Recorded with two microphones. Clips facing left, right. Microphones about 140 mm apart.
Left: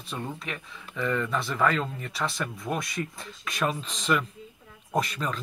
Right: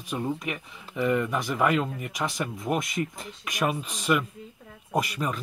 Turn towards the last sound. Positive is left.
turn(degrees=-10)  # may be behind; listen again after turning